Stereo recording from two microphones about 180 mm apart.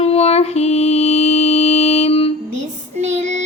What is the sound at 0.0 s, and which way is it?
Mantra, 35° left (ahead or behind).